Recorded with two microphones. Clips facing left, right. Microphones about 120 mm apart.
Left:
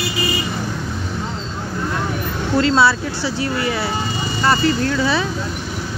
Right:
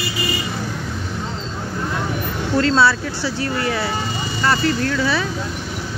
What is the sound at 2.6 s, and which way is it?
Speech, 10° left (ahead or behind).